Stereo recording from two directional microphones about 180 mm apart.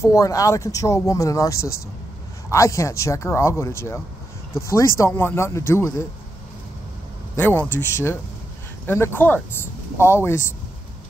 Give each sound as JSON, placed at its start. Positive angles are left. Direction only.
{"t": 0.0, "sound": "speech", "side_deg": 15}
{"t": 7.3, "sound": "speech", "side_deg": 10}